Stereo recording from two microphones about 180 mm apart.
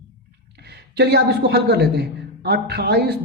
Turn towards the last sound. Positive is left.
turn(degrees=-60)  # may be behind; listen again after turning